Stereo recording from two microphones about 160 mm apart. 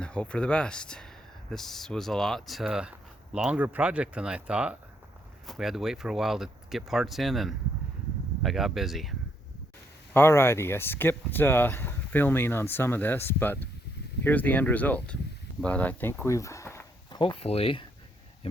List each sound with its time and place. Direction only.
0.0 s speech: 5° left (ahead or behind)
10.2 s speech: 15° left (ahead or behind)
17.1 s speech: 30° left (ahead or behind)